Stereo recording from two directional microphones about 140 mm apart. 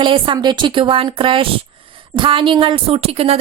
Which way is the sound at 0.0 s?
35° right (ahead or behind).